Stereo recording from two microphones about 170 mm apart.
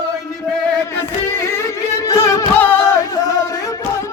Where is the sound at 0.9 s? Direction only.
15° left (ahead or behind).